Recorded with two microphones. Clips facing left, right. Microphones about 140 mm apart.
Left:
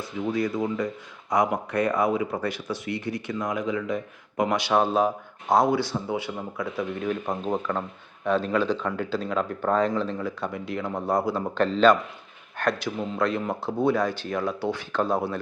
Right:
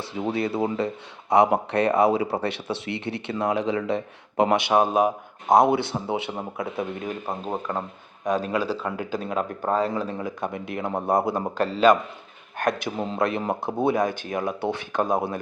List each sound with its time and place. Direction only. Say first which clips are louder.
0.0 s speech: even; 30° right (ahead or behind)
7.3 s speech: left 2 dB; 5° right (ahead or behind)
13.0 s speech: right 1 dB; 25° right (ahead or behind)